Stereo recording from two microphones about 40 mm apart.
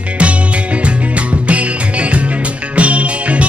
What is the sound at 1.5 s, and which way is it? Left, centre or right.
Music, right.